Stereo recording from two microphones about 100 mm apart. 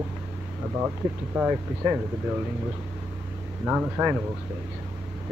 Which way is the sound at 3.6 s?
15° right (ahead or behind).